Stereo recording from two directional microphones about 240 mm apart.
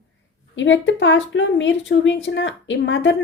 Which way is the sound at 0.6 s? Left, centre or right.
Left.